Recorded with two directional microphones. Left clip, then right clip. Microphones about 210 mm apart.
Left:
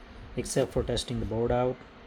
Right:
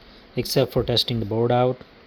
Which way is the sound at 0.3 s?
45° right (ahead or behind).